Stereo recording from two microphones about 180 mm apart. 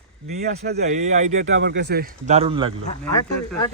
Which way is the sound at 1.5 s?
80° right.